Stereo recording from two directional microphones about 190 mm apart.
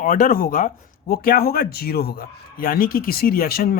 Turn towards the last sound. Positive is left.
turn(degrees=50)  # may be behind; listen again after turning